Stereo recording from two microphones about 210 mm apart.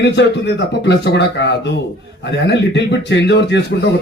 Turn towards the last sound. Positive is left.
turn(degrees=55)  # may be behind; listen again after turning